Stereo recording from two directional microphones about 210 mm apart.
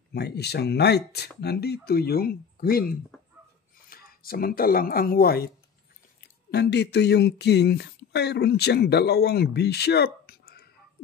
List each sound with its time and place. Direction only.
0.1 s speech: 50° left (ahead or behind)